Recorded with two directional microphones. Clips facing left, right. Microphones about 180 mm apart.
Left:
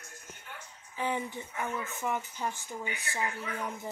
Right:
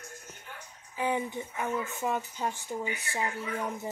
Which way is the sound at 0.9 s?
15° right (ahead or behind).